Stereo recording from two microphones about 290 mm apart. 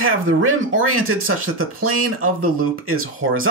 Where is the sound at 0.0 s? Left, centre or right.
Right.